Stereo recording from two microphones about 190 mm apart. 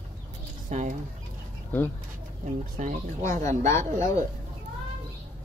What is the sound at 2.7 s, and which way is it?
Speech, 40° right (ahead or behind).